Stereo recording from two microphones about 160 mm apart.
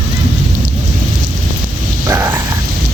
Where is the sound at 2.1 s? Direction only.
15° right (ahead or behind).